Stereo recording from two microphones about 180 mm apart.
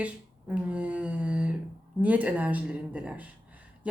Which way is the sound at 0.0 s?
5° right (ahead or behind).